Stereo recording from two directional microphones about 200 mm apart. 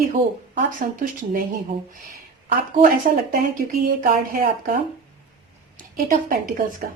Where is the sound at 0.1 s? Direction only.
40° right (ahead or behind).